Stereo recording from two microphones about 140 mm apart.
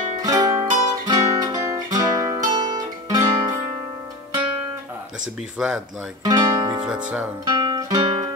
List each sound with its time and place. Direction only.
0.2 s music: 25° right (ahead or behind)
2.5 s guitar: 30° right (ahead or behind)
5.6 s speech: 5° right (ahead or behind)
6.2 s guitar: 30° right (ahead or behind)
6.9 s speech: 10° right (ahead or behind)
7.4 s guitar: 30° right (ahead or behind)